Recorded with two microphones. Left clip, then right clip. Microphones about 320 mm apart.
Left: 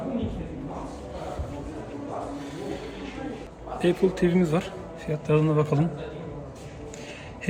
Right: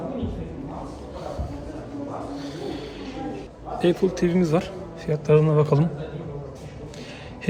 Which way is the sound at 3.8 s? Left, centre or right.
Centre.